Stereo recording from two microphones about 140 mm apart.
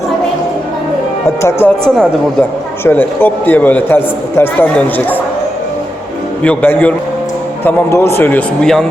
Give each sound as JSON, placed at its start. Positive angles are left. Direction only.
{"t": 1.6, "sound": "a man's voice", "side_deg": 5}
{"t": 6.4, "sound": "a man's voice", "side_deg": 10}